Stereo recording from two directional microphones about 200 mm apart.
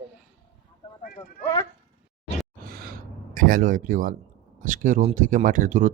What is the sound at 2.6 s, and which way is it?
Gasp, 50° right (ahead or behind).